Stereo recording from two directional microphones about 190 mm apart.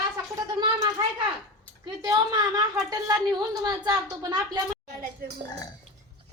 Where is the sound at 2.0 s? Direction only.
20° right (ahead or behind).